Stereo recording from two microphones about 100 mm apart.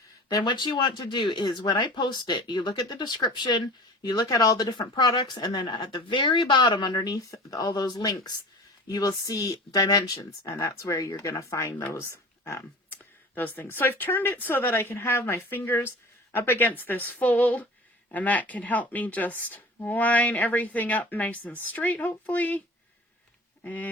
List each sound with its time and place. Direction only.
0.3 s speech: 45° left (ahead or behind); by 12.1 s 25° left (ahead or behind)
13.3 s speech: 20° left (ahead or behind)
23.6 s speech: 15° left (ahead or behind)